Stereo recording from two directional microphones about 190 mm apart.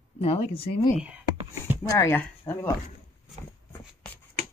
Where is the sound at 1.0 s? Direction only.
5° right (ahead or behind).